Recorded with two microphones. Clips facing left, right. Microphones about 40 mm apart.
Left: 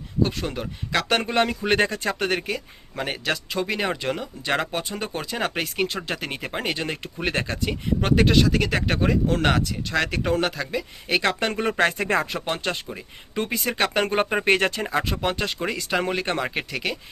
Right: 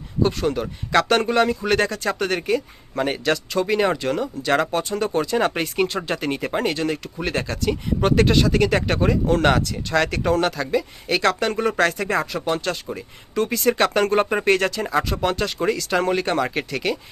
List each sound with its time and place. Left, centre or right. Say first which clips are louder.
0.2 s speech: right 4 dB; centre
1.4 s speech: right 2 dB; left
2.0 s speech: right 3 dB; centre
6.8 s speech: right 3 dB; left
7.4 s speech: right 4 dB; centre
8.0 s speech: right 2 dB; centre; by 12.0 s left
12.0 s speech: right 1 dB; left
13.6 s speech: right 5 dB; centre
14.4 s speech: right 1 dB; left
14.9 s speech: right 3 dB; centre